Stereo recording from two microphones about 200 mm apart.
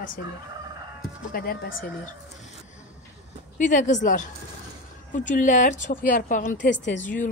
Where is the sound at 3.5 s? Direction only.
40° left (ahead or behind).